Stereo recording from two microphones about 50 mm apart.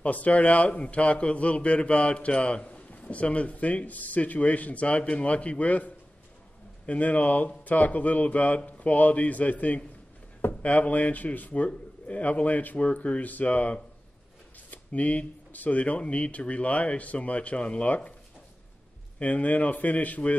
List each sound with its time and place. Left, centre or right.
0.0 s a man's voice: left
6.9 s a man's voice: left
19.1 s speech: left